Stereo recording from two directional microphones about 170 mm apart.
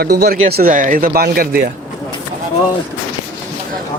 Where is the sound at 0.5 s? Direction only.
55° right (ahead or behind).